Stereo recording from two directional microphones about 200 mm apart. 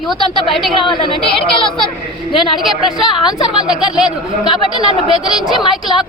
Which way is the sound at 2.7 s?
Centre (ahead or behind).